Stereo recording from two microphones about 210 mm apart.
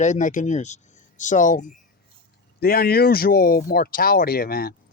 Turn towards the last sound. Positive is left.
turn(degrees=45)  # may be behind; listen again after turning